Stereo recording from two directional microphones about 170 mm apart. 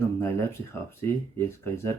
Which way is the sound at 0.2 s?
15° left (ahead or behind).